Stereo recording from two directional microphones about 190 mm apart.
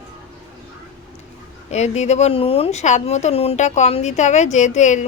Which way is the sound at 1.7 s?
35° left (ahead or behind).